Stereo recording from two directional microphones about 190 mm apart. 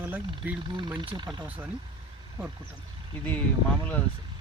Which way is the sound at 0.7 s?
25° right (ahead or behind).